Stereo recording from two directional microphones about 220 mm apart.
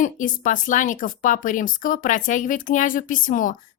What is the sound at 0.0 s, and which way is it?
Speech, 35° left (ahead or behind).